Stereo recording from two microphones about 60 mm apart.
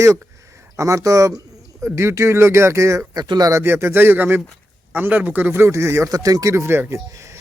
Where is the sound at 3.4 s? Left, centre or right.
Right.